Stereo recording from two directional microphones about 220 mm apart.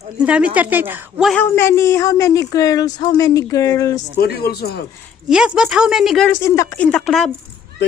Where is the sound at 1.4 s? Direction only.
10° left (ahead or behind).